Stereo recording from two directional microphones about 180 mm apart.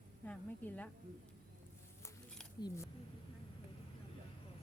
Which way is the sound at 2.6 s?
15° left (ahead or behind).